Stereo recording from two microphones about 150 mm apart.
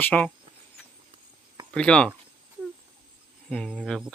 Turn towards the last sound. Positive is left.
turn(degrees=5)  # may be behind; listen again after turning